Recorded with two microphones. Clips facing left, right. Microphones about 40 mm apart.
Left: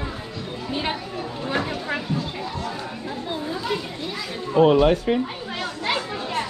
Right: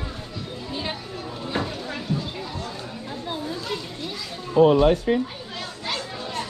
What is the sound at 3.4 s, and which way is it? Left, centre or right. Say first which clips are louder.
Children playing: left 3 dB; centre.